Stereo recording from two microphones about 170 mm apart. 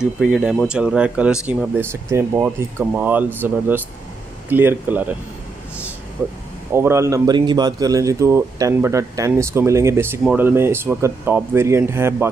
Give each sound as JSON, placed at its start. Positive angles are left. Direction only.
{"t": 0.0, "sound": "speech", "side_deg": -5}
{"t": 6.7, "sound": "speech", "side_deg": -15}